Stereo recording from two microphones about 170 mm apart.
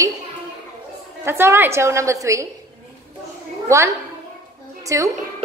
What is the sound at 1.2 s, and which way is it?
A woman's voice, 15° right (ahead or behind).